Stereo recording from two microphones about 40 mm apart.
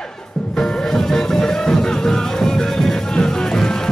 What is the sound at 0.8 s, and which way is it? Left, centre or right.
Music, centre.